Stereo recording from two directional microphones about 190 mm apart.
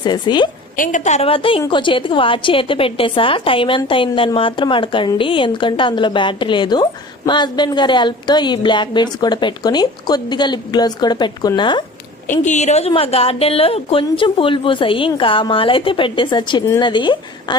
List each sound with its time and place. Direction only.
0.0 s a woman's voice: 25° left (ahead or behind)
0.8 s a woman's voice: 40° left (ahead or behind); by 11.8 s 25° left (ahead or behind)
12.3 s a woman's voice: 40° left (ahead or behind)